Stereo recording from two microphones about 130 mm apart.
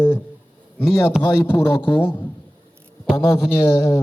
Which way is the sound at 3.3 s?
20° left (ahead or behind).